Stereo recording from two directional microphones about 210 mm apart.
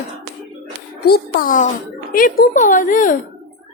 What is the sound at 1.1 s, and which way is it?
A child's voice, 45° left (ahead or behind).